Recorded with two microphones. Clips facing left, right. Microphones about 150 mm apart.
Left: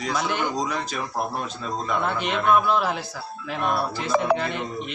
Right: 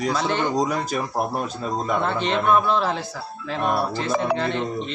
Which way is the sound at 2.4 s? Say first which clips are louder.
Left 1 dB; 10° left (ahead or behind).